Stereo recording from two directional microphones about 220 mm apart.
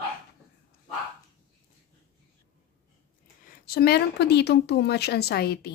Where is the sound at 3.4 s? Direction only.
40° left (ahead or behind).